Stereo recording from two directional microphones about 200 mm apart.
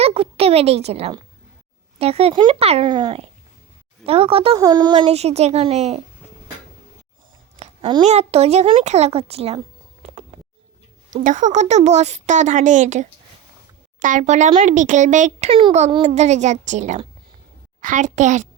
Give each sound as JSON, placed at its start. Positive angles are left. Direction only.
{"t": 0.0, "sound": "speech", "side_deg": -30}
{"t": 4.5, "sound": "speech", "side_deg": -20}
{"t": 7.6, "sound": "a sound", "side_deg": -25}
{"t": 8.0, "sound": "speech", "side_deg": -35}
{"t": 11.2, "sound": "a child's voice", "side_deg": -40}